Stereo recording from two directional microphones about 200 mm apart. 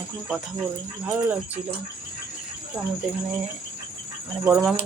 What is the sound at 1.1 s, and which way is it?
Speech, 10° right (ahead or behind).